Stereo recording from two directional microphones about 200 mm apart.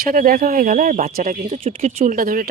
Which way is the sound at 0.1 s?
45° right (ahead or behind).